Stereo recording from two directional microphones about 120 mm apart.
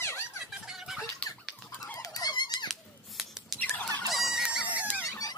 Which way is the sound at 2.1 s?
35° left (ahead or behind).